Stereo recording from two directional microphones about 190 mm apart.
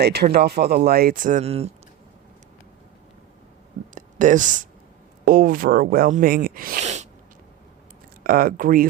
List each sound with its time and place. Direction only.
0.0 s speech: 55° right (ahead or behind); by 1.7 s 30° right (ahead or behind)
3.9 s a sound: 40° right (ahead or behind)
5.2 s speech: 45° right (ahead or behind)
8.2 s speech: 50° right (ahead or behind)